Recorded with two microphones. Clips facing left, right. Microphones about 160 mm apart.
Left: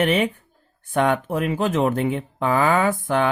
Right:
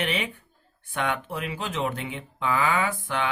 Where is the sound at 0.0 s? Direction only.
45° left (ahead or behind).